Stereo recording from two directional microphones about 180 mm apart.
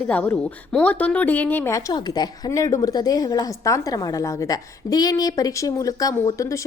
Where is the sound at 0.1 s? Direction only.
10° left (ahead or behind).